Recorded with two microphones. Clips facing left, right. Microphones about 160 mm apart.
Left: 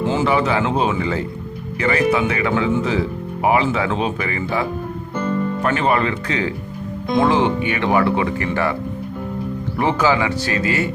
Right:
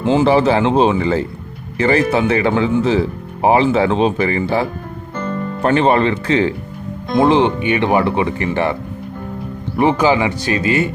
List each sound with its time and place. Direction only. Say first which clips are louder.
0.0 s a sound: right 5 dB; 20° right (ahead or behind)
0.3 s speech: right 5 dB; 30° right (ahead or behind)
5.6 s speech: right 7 dB; 30° right (ahead or behind)
9.7 s speech: right 4 dB; 20° right (ahead or behind)